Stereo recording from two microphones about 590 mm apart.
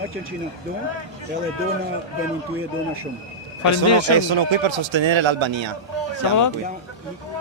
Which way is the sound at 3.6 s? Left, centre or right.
Left.